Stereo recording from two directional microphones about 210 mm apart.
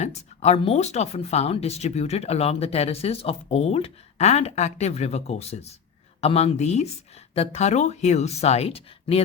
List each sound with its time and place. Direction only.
0.0 s speech: 30° left (ahead or behind)